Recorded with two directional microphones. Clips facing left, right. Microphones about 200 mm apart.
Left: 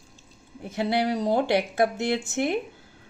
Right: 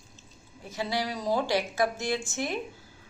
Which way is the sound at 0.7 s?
60° left (ahead or behind).